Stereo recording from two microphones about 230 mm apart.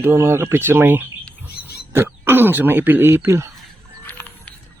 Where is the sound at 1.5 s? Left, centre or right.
Left.